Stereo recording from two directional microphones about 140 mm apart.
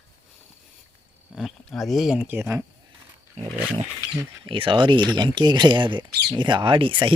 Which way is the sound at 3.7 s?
35° right (ahead or behind).